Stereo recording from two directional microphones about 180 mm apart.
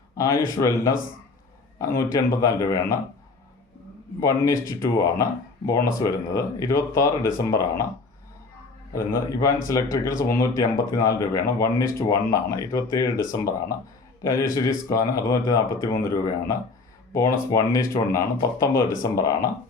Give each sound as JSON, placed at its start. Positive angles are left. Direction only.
{"t": 0.2, "sound": "speech", "side_deg": 15}
{"t": 4.2, "sound": "speech", "side_deg": 15}
{"t": 8.9, "sound": "a man's voice", "side_deg": 50}
{"t": 9.1, "sound": "speech", "side_deg": 15}